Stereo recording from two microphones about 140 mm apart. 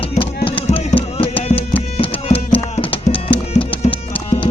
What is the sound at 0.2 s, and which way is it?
Music, 40° left (ahead or behind).